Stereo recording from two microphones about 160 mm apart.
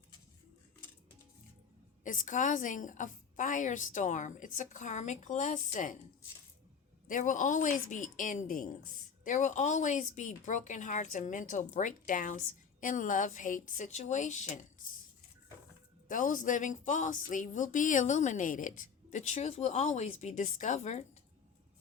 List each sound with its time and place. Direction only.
2.0 s a woman's voice: 55° left (ahead or behind)
7.1 s a woman's voice: 50° left (ahead or behind)
16.0 s a woman's voice: 55° left (ahead or behind)